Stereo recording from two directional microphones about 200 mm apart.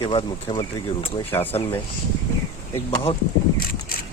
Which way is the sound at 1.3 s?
15° left (ahead or behind).